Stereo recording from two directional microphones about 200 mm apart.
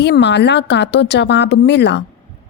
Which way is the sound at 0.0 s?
60° left (ahead or behind).